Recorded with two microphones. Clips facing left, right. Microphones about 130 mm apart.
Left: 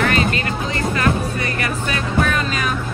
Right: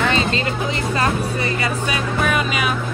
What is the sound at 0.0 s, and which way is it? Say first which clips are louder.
Music: left 1 dB; 25° right (ahead or behind).